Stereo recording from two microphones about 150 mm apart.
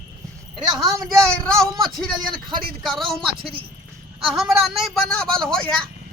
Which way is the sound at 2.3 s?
30° right (ahead or behind).